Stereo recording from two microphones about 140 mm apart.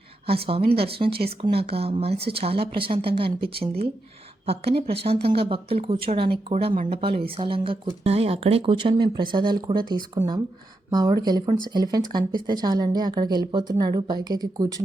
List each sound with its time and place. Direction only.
0.7 s a woman's voice: 45° right (ahead or behind)